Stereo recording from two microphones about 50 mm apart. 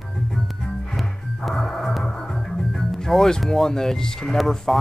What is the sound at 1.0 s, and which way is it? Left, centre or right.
Music, centre.